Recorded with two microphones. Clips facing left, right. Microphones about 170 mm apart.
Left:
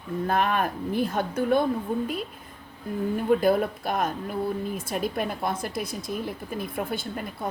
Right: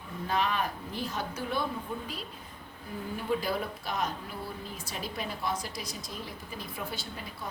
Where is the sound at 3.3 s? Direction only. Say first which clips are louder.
Left 9 dB; 55° left (ahead or behind).